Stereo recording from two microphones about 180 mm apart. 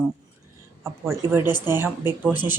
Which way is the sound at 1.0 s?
10° right (ahead or behind).